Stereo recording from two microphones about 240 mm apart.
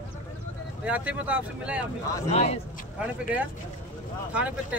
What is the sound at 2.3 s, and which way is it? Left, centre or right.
Speech, left.